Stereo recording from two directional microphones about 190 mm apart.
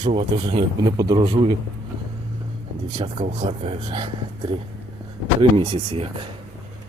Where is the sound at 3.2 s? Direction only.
35° right (ahead or behind).